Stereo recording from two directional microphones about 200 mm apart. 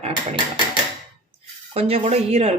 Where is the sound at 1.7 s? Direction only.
30° right (ahead or behind).